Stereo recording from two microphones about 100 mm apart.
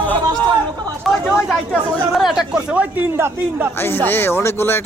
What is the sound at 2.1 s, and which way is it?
A man's voice, 5° right (ahead or behind).